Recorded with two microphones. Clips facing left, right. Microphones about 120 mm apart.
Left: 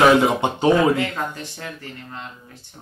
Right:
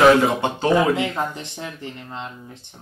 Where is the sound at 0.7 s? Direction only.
20° right (ahead or behind).